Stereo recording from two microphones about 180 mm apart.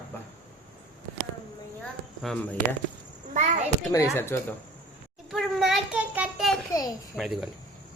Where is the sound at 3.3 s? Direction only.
40° right (ahead or behind).